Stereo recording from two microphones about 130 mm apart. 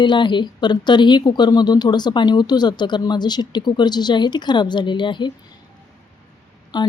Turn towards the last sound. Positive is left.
turn(degrees=30)  # may be behind; listen again after turning